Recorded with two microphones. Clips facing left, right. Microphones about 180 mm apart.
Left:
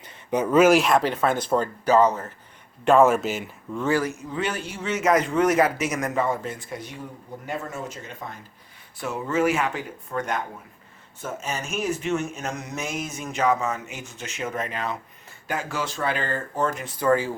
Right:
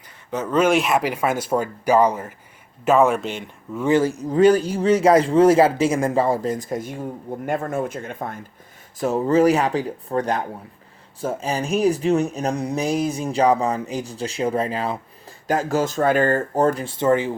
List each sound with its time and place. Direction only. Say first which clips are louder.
0.3 s speech: left 2 dB; 15° left (ahead or behind); by 2.3 s 10° right (ahead or behind)
2.8 s speech: even; centre (ahead or behind)
3.8 s speech: right 5 dB; 20° right (ahead or behind)
4.0 s a man's voice: right 12 dB; 40° right (ahead or behind); by 8.4 s 55° right (ahead or behind)
9.0 s a man's voice: right 7 dB; 40° right (ahead or behind)
15.4 s a man's voice: right 8 dB; 40° right (ahead or behind); by 17.3 s 20° right (ahead or behind)